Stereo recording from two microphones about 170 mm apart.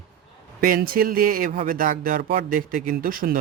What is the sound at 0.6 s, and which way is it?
Speech, 60° right (ahead or behind).